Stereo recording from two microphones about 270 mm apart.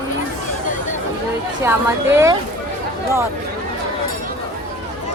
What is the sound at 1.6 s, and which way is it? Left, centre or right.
Speech, centre.